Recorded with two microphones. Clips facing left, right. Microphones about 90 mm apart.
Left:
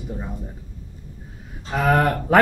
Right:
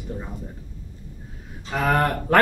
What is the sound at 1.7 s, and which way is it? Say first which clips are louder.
Speech: left 2 dB; 5° left (ahead or behind).